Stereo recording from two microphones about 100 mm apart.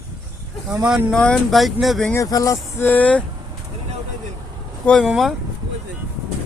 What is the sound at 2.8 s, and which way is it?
Speech, 15° left (ahead or behind).